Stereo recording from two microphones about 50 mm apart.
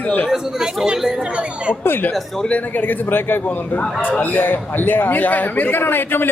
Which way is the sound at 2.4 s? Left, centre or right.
Left.